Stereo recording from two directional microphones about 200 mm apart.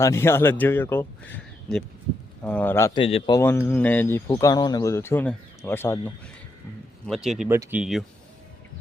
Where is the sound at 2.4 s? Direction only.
5° left (ahead or behind).